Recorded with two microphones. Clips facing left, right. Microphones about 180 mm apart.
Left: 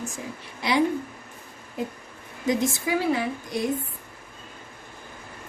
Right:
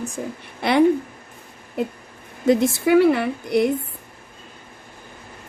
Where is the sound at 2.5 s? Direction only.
65° right (ahead or behind).